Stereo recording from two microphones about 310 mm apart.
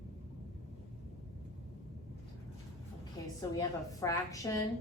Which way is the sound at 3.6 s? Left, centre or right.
Centre.